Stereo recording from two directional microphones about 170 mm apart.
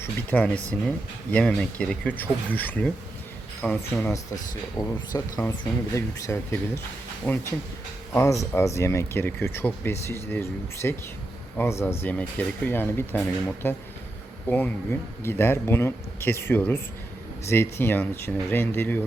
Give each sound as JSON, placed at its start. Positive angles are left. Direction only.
{"t": 0.0, "sound": "speech", "side_deg": 10}